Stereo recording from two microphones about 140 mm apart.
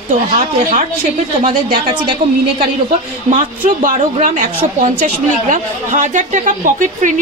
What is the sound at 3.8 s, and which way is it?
A woman's voice, 65° right (ahead or behind).